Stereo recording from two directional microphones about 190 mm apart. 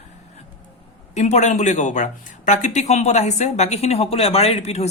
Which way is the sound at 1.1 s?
35° left (ahead or behind).